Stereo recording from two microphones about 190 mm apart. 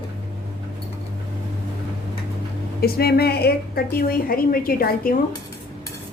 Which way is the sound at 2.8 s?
55° left (ahead or behind).